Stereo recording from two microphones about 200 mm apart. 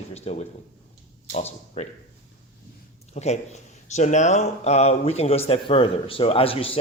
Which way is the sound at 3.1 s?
35° left (ahead or behind).